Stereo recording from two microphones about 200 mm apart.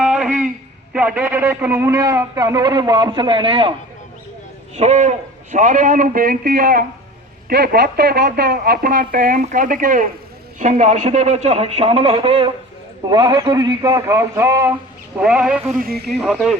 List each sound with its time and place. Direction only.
0.0 s a sound: 5° right (ahead or behind)
0.9 s a man's voice: 10° right (ahead or behind); by 3.8 s 25° right (ahead or behind)
4.8 s a man's voice: 35° right (ahead or behind); by 15.7 s 5° right (ahead or behind)
15.8 s speech: 50° right (ahead or behind)
16.3 s speech: centre (ahead or behind)